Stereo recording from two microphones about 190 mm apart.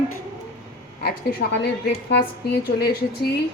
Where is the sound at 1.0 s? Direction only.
60° left (ahead or behind).